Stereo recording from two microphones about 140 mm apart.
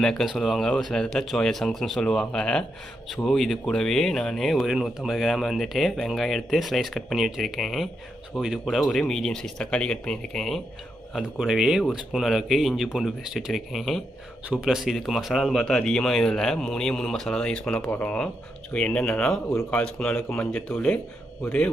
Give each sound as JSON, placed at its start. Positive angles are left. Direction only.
{"t": 0.0, "sound": "speech", "side_deg": 0}
{"t": 19.5, "sound": "speech", "side_deg": 15}